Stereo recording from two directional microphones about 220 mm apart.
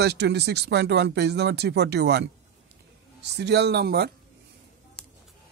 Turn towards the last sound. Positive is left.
turn(degrees=-50)  # may be behind; listen again after turning